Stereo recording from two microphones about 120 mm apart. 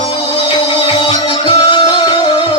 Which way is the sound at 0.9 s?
40° left (ahead or behind).